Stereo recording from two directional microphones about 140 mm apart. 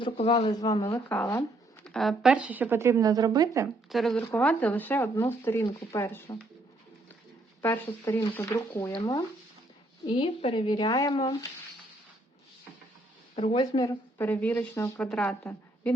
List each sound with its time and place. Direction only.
0.0 s speech: 45° left (ahead or behind)
0.5 s speech: 25° left (ahead or behind)
0.9 s speech: 10° left (ahead or behind)
1.8 s speech: 5° left (ahead or behind); by 3.7 s 25° right (ahead or behind)
3.8 s speech: centre (ahead or behind)
4.2 s speech: 10° left (ahead or behind)
7.6 s speech: 15° left (ahead or behind)
9.0 s speech: 30° left (ahead or behind)
13.3 s speech: 45° left (ahead or behind)
14.2 s a woman's voice: 10° left (ahead or behind)